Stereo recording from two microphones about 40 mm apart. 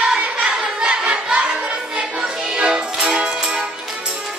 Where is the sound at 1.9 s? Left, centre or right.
Right.